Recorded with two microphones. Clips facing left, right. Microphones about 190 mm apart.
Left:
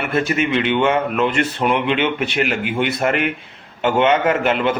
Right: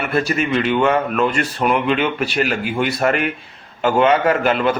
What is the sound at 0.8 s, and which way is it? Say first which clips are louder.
Speech: right 1 dB; 25° left (ahead or behind).